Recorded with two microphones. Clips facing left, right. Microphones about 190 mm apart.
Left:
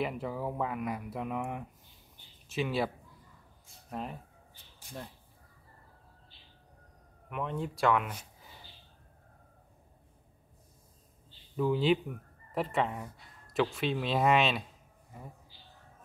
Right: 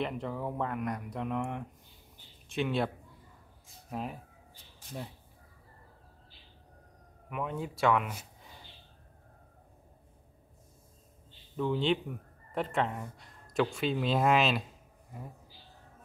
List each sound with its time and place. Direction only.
0.0 s speech: 5° left (ahead or behind)
7.2 s speech: 5° right (ahead or behind)
11.5 s speech: 5° left (ahead or behind)